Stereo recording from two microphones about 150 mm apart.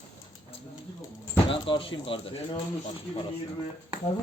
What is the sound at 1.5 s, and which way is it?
Speech, 35° left (ahead or behind).